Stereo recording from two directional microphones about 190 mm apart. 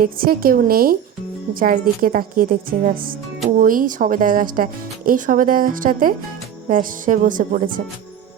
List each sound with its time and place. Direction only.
0.0 s speech: 50° right (ahead or behind)